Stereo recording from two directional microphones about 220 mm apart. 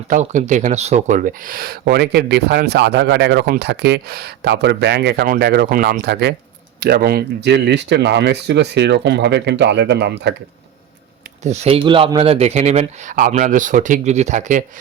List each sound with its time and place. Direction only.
0.1 s speech: 35° right (ahead or behind); by 10.3 s 50° right (ahead or behind)
11.4 s speech: 30° right (ahead or behind)